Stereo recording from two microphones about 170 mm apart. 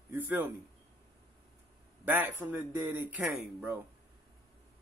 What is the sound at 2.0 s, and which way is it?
Speech, 10° right (ahead or behind).